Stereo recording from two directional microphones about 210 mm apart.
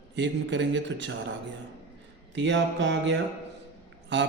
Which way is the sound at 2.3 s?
60° right (ahead or behind).